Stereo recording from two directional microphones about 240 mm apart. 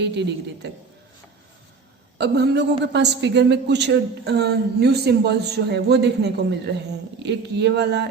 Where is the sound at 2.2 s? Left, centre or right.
Right.